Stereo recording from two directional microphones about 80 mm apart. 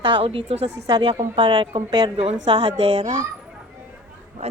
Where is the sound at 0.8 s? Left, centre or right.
Right.